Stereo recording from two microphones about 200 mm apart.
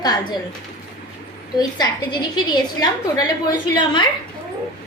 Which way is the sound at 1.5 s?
20° left (ahead or behind).